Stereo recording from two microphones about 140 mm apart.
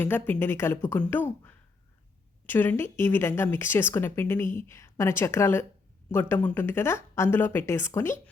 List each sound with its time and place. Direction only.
0.0 s speech: 15° left (ahead or behind)
2.5 s speech: 15° left (ahead or behind)